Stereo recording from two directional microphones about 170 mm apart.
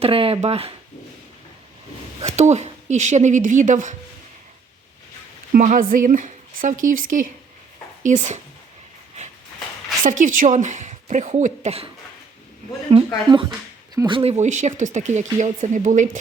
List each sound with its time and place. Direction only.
0.0 s speech: 35° right (ahead or behind)
2.2 s speech: 40° right (ahead or behind)
5.5 s speech: 50° right (ahead or behind)
10.0 s speech: 50° right (ahead or behind)
12.9 s speech: 35° right (ahead or behind)
13.9 s speech: 20° right (ahead or behind)
14.2 s speech: 40° right (ahead or behind)